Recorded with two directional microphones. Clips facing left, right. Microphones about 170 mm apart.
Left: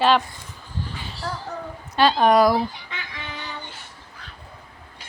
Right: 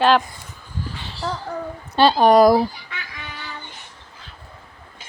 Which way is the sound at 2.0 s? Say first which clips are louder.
Right 3 dB; 35° right (ahead or behind).